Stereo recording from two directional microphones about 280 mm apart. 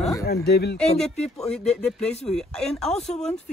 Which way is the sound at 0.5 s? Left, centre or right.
Left.